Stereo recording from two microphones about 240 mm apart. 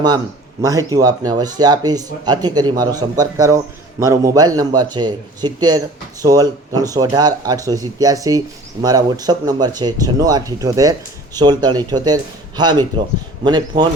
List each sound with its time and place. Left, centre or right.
0.6 s speech: centre